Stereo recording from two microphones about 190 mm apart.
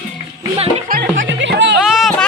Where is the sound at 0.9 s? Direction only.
50° right (ahead or behind).